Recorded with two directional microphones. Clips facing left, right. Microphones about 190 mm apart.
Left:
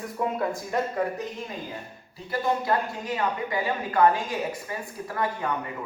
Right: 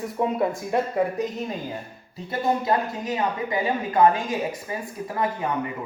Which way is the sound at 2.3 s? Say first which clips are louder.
Right 2 dB; 20° right (ahead or behind).